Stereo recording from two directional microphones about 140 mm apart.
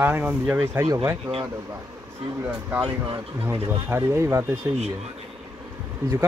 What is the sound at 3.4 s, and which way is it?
Speech, 20° right (ahead or behind).